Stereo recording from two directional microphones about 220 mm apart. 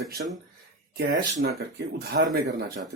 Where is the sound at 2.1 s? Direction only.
45° right (ahead or behind).